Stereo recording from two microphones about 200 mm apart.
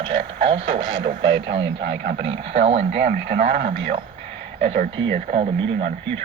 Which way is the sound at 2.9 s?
55° right (ahead or behind).